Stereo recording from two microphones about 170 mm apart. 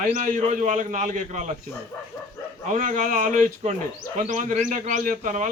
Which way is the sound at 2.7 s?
50° right (ahead or behind).